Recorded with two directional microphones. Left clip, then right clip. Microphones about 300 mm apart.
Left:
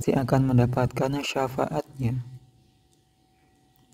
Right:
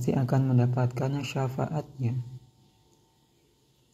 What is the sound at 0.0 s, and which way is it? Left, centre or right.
A man's voice, left.